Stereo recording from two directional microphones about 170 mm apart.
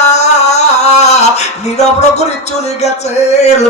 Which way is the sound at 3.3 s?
40° left (ahead or behind).